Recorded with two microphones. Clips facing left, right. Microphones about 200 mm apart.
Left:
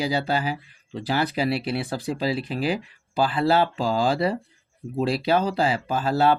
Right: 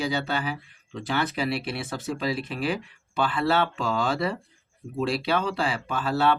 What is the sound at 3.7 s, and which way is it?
Speech, 35° left (ahead or behind).